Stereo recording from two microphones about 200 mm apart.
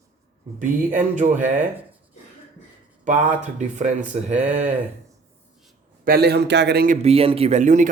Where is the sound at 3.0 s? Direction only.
40° right (ahead or behind).